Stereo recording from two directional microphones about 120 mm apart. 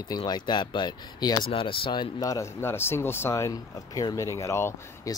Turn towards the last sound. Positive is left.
turn(degrees=25)  # may be behind; listen again after turning